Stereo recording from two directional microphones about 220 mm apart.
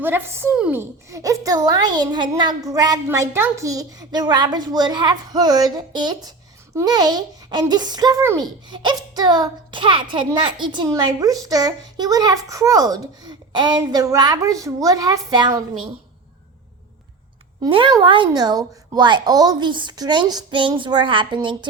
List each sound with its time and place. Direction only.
0.0 s a woman's voice: 10° right (ahead or behind)
17.6 s speech: 20° right (ahead or behind)